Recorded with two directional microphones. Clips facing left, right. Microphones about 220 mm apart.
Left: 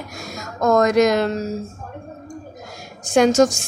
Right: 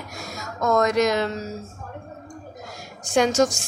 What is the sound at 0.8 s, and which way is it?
Speech, 50° left (ahead or behind).